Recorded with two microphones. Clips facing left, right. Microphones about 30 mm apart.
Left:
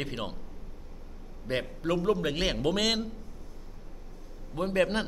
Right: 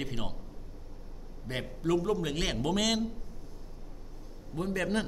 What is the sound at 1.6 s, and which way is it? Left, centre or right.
A man's voice, left.